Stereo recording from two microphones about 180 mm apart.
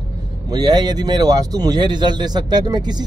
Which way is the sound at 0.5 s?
20° right (ahead or behind).